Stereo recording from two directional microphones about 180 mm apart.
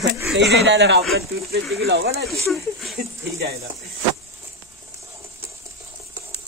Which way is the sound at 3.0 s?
60° right (ahead or behind).